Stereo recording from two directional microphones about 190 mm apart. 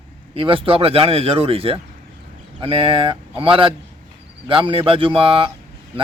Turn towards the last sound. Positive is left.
turn(degrees=-30)  # may be behind; listen again after turning